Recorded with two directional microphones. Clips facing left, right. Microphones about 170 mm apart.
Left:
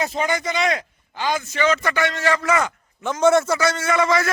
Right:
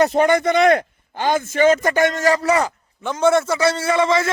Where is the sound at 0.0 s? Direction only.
60° right (ahead or behind); by 2.7 s 35° right (ahead or behind).